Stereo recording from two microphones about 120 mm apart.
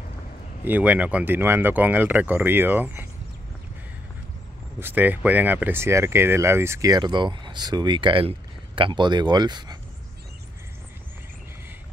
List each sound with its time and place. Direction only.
0.7 s speech: 15° right (ahead or behind)
4.7 s speech: 15° right (ahead or behind); by 9.8 s 35° right (ahead or behind)